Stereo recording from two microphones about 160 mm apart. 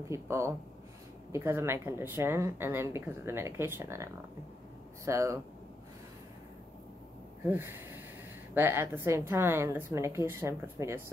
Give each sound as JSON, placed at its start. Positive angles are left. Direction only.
{"t": 0.1, "sound": "speech", "side_deg": -15}
{"t": 7.4, "sound": "a sound", "side_deg": -15}
{"t": 8.5, "sound": "speech", "side_deg": -15}